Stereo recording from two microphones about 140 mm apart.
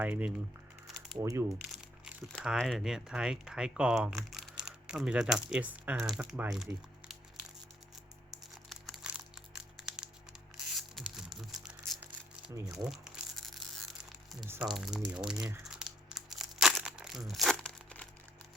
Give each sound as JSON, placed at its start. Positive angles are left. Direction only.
{"t": 0.0, "sound": "speech", "side_deg": -10}
{"t": 1.2, "sound": "speech", "side_deg": -20}
{"t": 2.4, "sound": "speech", "side_deg": 0}
{"t": 8.7, "sound": "crumpling", "side_deg": 0}
{"t": 9.7, "sound": "a sound", "side_deg": -5}
{"t": 12.7, "sound": "speech", "side_deg": 0}
{"t": 13.4, "sound": "a sound", "side_deg": 0}
{"t": 14.6, "sound": "speech", "side_deg": -5}
{"t": 15.6, "sound": "crumpling", "side_deg": -5}